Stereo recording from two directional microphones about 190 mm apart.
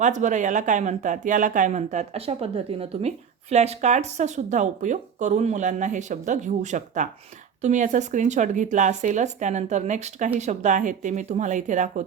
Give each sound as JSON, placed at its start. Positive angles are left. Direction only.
{"t": 0.0, "sound": "a woman's voice", "side_deg": -40}